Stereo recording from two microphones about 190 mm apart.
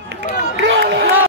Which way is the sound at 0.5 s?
70° right (ahead or behind).